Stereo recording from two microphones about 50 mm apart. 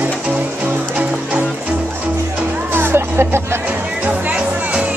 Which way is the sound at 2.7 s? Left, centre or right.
Right.